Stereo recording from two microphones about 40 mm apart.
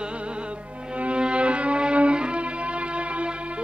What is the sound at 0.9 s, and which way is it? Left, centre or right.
Music, right.